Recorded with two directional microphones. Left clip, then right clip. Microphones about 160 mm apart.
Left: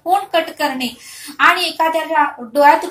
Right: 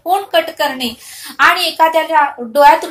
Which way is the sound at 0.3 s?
30° right (ahead or behind).